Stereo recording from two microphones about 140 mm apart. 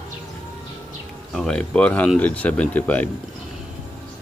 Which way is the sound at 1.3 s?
5° left (ahead or behind).